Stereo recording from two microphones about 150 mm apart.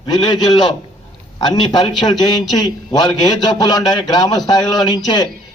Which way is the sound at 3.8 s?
Centre (ahead or behind).